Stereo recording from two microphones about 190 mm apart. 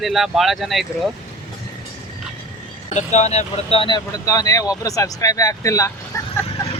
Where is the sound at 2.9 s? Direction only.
35° left (ahead or behind); by 5.9 s 15° left (ahead or behind).